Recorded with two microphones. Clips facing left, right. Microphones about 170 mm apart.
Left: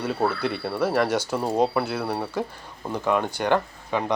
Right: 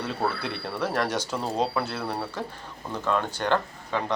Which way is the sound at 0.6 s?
10° left (ahead or behind).